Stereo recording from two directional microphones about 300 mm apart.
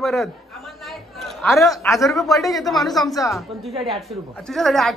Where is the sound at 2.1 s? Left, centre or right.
Centre.